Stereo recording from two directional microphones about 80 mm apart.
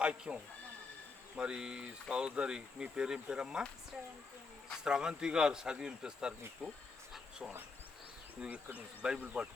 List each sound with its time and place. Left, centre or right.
0.0 s speech: centre
1.4 s speech: centre
4.8 s speech: centre
6.6 s speech: centre
7.1 s a sound: centre
8.4 s speech: centre